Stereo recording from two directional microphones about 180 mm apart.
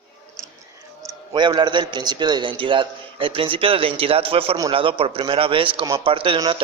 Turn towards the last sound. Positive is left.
turn(degrees=-25)  # may be behind; listen again after turning